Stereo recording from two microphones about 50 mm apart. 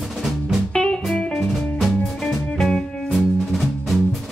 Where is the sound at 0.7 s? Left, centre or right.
Centre.